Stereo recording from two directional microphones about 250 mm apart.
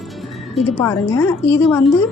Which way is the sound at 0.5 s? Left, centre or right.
Centre.